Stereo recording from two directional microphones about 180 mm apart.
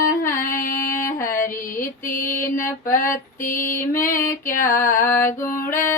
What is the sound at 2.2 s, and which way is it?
Female singing, 15° left (ahead or behind).